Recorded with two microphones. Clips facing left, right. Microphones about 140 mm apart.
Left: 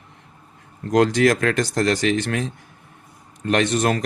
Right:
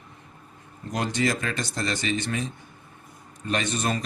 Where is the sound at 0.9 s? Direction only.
90° left.